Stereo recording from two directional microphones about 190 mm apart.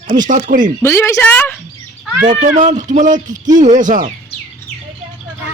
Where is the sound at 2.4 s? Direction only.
40° right (ahead or behind).